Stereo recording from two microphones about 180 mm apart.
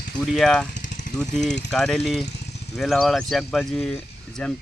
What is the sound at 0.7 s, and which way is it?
Vehicle, 45° left (ahead or behind).